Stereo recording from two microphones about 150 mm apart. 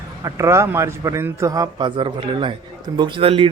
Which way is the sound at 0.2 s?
20° right (ahead or behind).